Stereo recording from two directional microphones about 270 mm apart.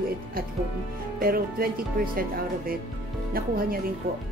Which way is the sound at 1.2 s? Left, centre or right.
Right.